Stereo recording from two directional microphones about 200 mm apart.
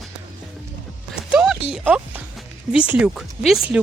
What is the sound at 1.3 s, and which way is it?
Clip-clop, 5° right (ahead or behind).